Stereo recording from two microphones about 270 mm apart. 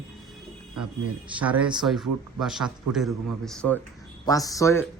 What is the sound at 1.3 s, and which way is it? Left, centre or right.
Speech, centre.